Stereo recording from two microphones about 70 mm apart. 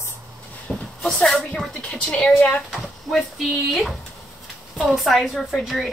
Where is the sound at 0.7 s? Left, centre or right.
Centre.